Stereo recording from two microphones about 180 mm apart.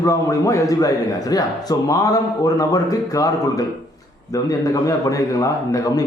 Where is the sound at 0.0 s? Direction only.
20° left (ahead or behind).